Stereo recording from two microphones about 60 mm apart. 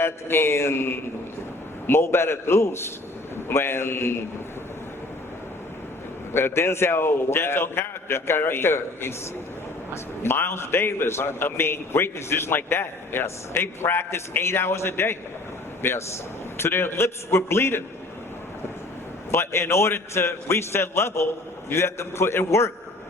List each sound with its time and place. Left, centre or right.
0.0 s a man's voice: left
6.3 s a man's voice: left
19.3 s a man's voice: left